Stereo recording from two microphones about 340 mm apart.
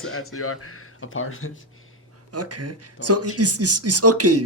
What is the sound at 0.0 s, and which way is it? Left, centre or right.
Speech, left.